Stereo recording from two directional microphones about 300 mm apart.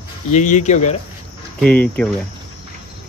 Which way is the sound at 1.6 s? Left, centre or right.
Centre.